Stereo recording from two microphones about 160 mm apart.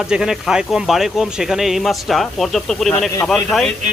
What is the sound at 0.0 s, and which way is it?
Speech, 5° right (ahead or behind).